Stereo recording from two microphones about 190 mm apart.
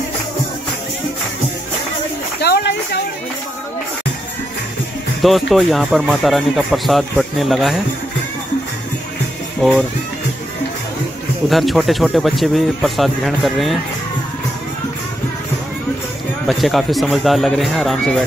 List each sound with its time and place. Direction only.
2.4 s a sound: 60° left (ahead or behind)
5.2 s speech: centre (ahead or behind)
9.6 s speech: centre (ahead or behind)
11.4 s speech: centre (ahead or behind)
16.4 s speech: centre (ahead or behind)